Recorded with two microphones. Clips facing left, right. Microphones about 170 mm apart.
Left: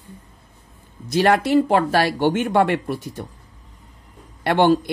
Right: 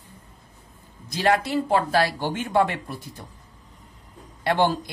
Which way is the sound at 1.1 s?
70° left (ahead or behind).